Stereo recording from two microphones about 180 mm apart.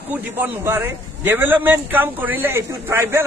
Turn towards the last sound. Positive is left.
turn(degrees=-15)  # may be behind; listen again after turning